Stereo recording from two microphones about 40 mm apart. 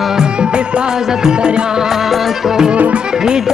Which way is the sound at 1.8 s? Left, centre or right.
Centre.